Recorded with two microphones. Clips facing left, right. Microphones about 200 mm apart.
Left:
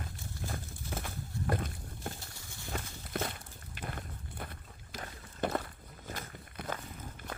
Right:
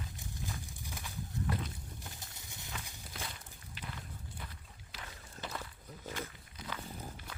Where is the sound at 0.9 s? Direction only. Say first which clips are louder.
Left 6 dB; 55° left (ahead or behind).